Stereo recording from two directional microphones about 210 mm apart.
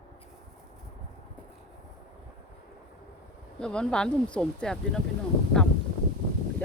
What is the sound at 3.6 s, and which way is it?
Speech, 5° left (ahead or behind).